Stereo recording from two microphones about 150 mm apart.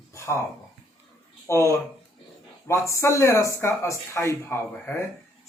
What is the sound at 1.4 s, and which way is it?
Speech, 20° left (ahead or behind).